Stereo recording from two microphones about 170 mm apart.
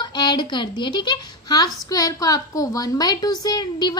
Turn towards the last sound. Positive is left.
turn(degrees=25)  # may be behind; listen again after turning